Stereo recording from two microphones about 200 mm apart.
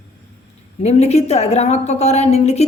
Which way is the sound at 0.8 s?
30° left (ahead or behind).